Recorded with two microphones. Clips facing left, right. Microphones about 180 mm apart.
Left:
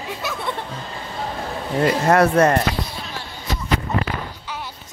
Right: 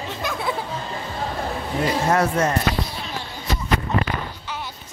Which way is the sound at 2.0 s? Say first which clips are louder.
Left 6 dB; 65° left (ahead or behind).